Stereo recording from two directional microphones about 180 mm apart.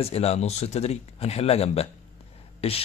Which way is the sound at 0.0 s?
35° left (ahead or behind).